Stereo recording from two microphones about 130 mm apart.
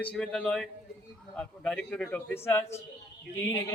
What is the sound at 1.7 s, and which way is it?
A man's voice, 5° left (ahead or behind).